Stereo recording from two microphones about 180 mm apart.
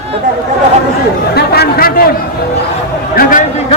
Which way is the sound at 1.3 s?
60° left (ahead or behind).